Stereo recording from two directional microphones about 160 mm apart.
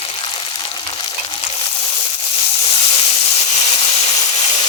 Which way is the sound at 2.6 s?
35° left (ahead or behind).